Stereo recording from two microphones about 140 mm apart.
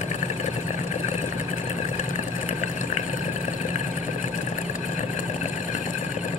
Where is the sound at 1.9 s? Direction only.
60° left (ahead or behind).